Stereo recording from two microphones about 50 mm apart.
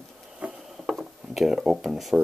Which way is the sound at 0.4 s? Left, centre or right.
Right.